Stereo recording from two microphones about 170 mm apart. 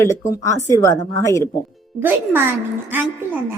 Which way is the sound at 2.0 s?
15° right (ahead or behind).